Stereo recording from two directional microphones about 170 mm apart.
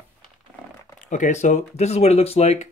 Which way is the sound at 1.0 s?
45° left (ahead or behind).